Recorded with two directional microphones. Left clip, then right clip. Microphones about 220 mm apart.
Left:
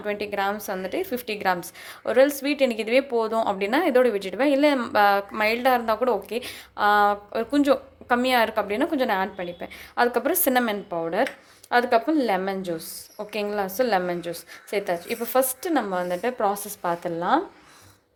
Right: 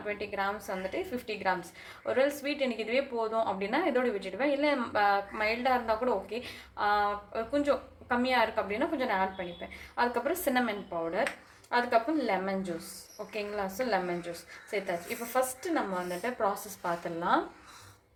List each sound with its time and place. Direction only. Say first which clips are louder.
0.0 s a woman's voice: left 7 dB; 50° left (ahead or behind)